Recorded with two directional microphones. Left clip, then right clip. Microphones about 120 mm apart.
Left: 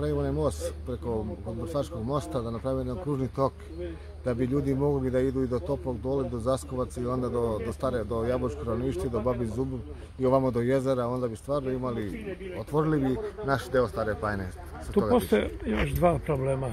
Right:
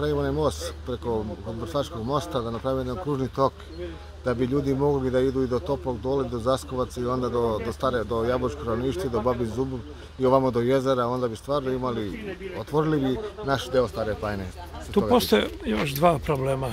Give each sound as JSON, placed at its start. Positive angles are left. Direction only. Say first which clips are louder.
{"t": 0.0, "sound": "a man's voice", "louder": "right 4 dB", "side_deg": -15}